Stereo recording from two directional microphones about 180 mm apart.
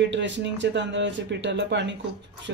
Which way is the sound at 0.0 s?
80° right.